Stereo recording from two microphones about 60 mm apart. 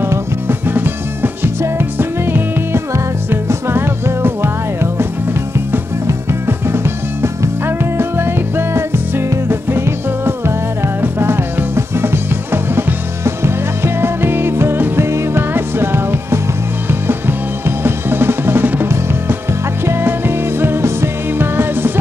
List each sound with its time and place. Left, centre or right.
0.0 s music: right
6.0 s music: right